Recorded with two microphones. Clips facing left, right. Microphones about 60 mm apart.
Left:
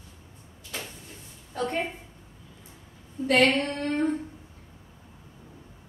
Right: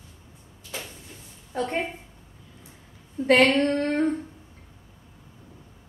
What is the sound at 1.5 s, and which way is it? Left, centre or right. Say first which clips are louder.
Speech: right 2 dB; right.